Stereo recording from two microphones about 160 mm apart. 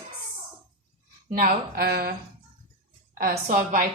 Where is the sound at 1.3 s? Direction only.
70° right (ahead or behind).